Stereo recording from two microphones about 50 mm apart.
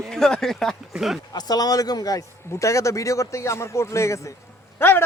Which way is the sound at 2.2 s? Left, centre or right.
Left.